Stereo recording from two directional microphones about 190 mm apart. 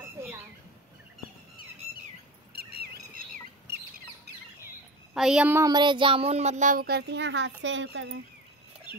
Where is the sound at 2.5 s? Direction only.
55° right (ahead or behind).